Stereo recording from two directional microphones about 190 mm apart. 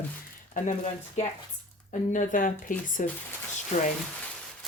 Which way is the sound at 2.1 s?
45° left (ahead or behind).